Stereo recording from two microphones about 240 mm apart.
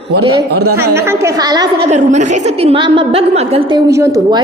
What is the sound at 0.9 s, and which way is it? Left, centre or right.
Speech, centre.